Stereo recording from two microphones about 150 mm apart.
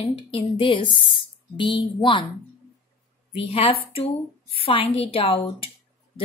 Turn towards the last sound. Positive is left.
turn(degrees=40)  # may be behind; listen again after turning